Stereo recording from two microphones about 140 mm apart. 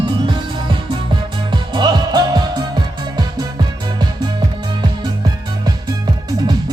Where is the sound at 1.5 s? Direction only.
30° right (ahead or behind).